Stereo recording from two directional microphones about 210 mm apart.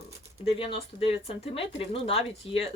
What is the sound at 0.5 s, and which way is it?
Speech, 25° left (ahead or behind).